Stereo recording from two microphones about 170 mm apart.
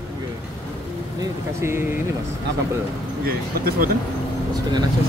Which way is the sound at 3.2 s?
60° right (ahead or behind).